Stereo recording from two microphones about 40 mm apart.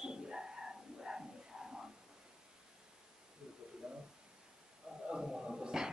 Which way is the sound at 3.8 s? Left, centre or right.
Centre.